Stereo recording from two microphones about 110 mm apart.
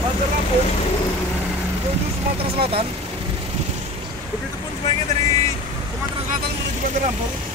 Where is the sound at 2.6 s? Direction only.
60° right (ahead or behind).